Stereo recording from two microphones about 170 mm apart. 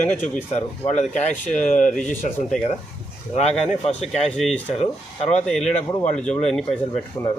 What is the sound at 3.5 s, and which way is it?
Speech, centre (ahead or behind).